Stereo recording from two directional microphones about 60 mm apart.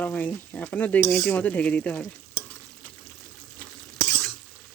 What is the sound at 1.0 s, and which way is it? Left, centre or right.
Dishes, centre.